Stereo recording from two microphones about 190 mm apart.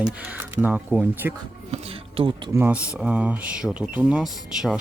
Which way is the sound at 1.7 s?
30° right (ahead or behind).